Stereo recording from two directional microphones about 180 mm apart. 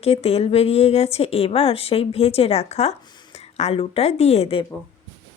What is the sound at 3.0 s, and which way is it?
A woman's voice, 25° left (ahead or behind).